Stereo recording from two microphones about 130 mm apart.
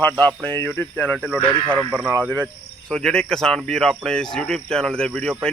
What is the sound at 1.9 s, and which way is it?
Speech, 10° right (ahead or behind).